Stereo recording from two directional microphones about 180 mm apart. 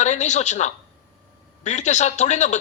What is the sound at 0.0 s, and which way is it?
A woman's voice, 40° left (ahead or behind).